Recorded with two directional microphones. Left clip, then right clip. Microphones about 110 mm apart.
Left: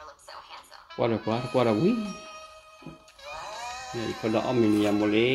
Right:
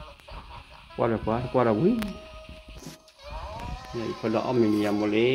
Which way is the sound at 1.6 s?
45° left (ahead or behind).